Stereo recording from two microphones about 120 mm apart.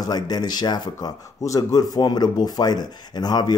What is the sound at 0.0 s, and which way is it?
Speech, 35° left (ahead or behind).